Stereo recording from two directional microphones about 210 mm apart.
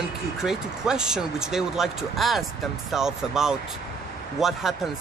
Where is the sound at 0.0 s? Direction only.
5° right (ahead or behind).